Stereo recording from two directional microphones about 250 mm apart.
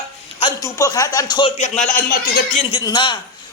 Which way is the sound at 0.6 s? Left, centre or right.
Centre.